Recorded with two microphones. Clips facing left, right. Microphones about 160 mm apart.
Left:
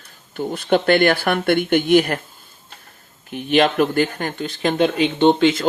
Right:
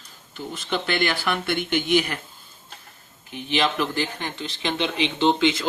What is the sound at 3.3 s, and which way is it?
Speech, 55° left (ahead or behind).